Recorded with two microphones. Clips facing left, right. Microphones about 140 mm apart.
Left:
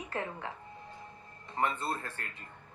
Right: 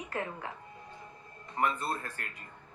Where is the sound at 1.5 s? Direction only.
30° left (ahead or behind).